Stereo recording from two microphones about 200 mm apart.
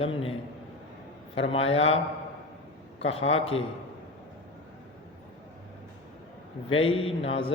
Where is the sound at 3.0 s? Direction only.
30° left (ahead or behind).